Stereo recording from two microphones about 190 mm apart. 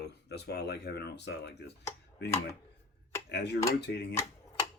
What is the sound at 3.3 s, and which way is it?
Speech, 60° left (ahead or behind).